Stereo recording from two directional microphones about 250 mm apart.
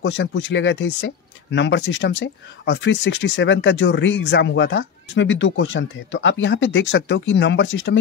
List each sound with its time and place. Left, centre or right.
0.0 s speech: left